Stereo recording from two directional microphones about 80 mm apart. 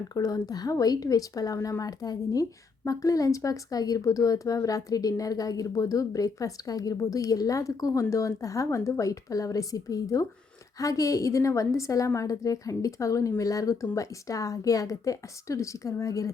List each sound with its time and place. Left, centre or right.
0.1 s a woman's voice: left